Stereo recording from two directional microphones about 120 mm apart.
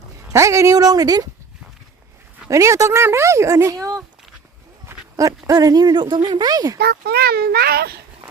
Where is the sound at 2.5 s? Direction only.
25° right (ahead or behind).